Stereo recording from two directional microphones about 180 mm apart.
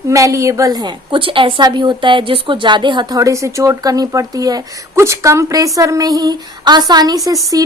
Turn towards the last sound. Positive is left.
turn(degrees=-20)  # may be behind; listen again after turning